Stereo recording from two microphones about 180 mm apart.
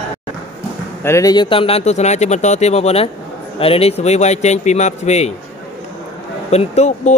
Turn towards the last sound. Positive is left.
turn(degrees=40)  # may be behind; listen again after turning